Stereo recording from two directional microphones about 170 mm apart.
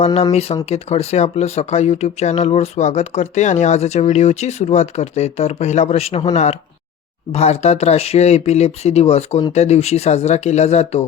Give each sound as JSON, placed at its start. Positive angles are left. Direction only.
{"t": 0.0, "sound": "speech", "side_deg": 40}